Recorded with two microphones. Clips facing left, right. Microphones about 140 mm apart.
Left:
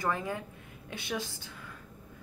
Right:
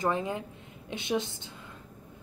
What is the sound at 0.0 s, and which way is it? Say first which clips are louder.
A woman's voice: right 3 dB; 20° right (ahead or behind).